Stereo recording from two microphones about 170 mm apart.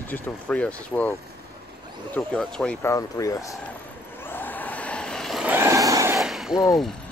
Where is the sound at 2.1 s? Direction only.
5° left (ahead or behind).